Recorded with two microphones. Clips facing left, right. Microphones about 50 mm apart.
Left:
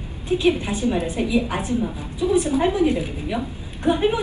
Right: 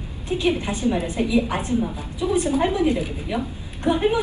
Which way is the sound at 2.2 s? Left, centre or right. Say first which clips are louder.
Left 2 dB; right.